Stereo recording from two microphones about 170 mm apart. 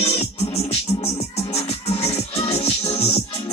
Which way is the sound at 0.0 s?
40° left (ahead or behind).